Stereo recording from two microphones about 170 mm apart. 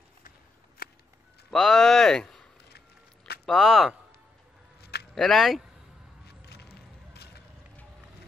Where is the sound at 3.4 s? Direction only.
Centre (ahead or behind).